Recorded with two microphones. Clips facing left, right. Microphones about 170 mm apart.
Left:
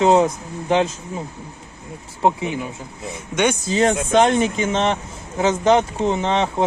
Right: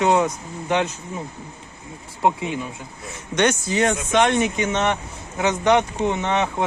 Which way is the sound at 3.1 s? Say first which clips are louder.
Even; 10° left (ahead or behind).